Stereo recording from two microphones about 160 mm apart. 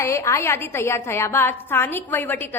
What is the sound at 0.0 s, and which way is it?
A woman's voice, 20° left (ahead or behind).